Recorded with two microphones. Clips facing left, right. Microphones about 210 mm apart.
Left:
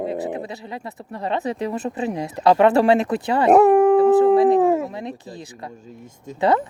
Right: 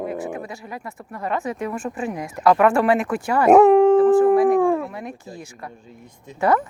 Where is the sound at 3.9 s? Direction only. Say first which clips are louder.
Even; 25° left (ahead or behind).